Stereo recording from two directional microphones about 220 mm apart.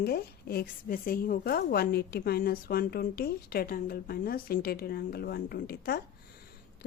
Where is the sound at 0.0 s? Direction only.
45° left (ahead or behind).